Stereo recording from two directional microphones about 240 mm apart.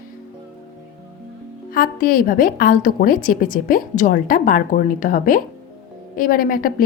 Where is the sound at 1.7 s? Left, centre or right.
Left.